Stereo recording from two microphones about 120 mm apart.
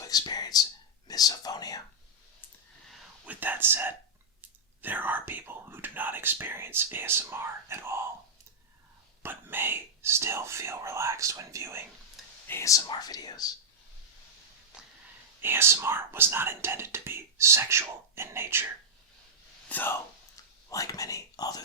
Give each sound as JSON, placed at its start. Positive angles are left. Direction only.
{"t": 0.0, "sound": "speech", "side_deg": 35}
{"t": 3.2, "sound": "speech", "side_deg": -15}
{"t": 9.2, "sound": "speech", "side_deg": -15}
{"t": 12.5, "sound": "speech", "side_deg": 25}
{"t": 15.4, "sound": "speech", "side_deg": -20}
{"t": 19.6, "sound": "speech", "side_deg": 15}
{"t": 20.3, "sound": "a sound", "side_deg": 30}